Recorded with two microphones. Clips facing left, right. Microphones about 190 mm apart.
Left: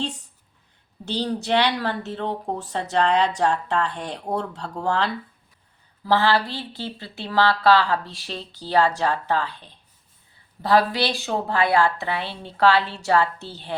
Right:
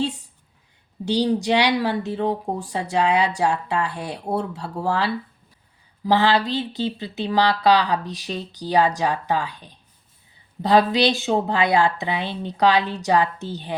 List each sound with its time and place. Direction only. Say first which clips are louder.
0.0 s a sound: right 5 dB; 10° right (ahead or behind)
1.0 s speech: right 6 dB; 15° right (ahead or behind)
6.1 s speech: right 2 dB; 15° right (ahead or behind)